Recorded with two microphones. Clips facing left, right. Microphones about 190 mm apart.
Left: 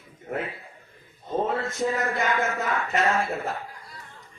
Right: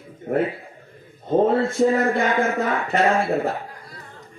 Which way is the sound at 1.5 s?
35° right (ahead or behind).